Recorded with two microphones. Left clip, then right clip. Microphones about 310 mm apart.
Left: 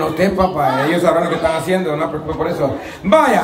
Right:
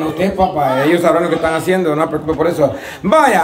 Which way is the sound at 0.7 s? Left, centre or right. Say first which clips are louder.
Right 2 dB; centre.